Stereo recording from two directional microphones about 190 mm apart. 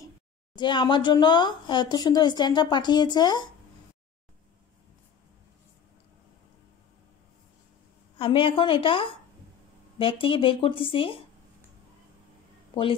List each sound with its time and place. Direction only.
0.6 s speech: 25° left (ahead or behind)
8.2 s speech: 25° left (ahead or behind)